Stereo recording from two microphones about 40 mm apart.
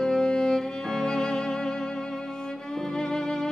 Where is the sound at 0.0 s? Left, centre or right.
Centre.